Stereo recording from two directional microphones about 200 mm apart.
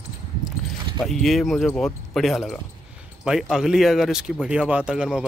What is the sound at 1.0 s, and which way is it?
Speech, centre (ahead or behind).